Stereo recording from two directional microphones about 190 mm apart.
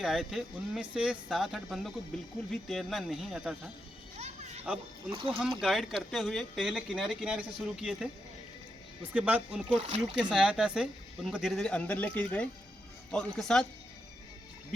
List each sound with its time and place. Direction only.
0.0 s speech: centre (ahead or behind)
5.1 s speech: 30° right (ahead or behind)
5.4 s speech: centre (ahead or behind)
9.1 s speech: 5° right (ahead or behind)